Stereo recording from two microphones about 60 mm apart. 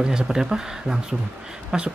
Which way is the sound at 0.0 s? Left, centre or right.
Centre.